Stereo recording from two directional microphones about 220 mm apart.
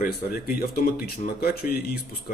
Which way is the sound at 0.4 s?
40° left (ahead or behind).